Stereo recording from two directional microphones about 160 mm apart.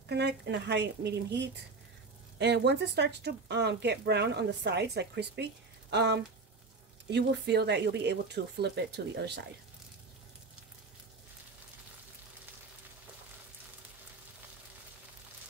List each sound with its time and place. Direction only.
0.1 s speech: 90° right